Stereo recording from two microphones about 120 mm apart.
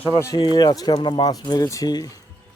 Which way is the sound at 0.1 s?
25° left (ahead or behind).